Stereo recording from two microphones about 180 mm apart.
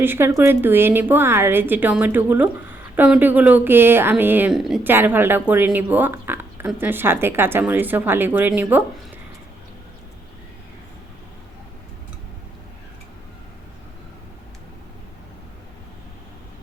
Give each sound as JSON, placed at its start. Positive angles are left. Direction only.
{"t": 0.0, "sound": "a woman's voice", "side_deg": -10}